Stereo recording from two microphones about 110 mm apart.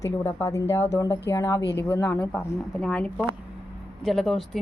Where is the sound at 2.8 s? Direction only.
10° left (ahead or behind).